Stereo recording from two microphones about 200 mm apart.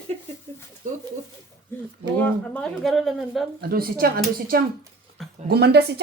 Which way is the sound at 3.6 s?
50° right (ahead or behind).